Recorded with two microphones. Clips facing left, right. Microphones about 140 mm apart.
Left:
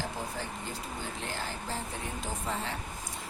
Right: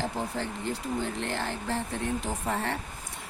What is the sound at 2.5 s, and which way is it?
Speech, 60° right (ahead or behind).